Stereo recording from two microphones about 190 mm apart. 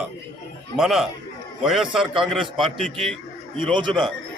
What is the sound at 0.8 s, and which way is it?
A man's voice, centre (ahead or behind).